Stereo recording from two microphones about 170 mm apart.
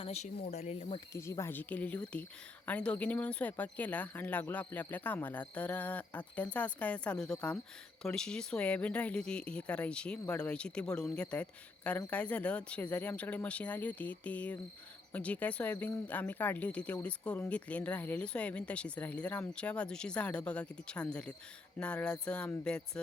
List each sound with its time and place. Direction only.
0.0 s speech: 35° left (ahead or behind)
1.1 s speech: 15° left (ahead or behind)
21.8 s a sound: 5° left (ahead or behind)